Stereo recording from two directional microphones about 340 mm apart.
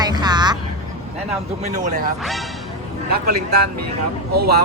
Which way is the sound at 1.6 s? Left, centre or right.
Right.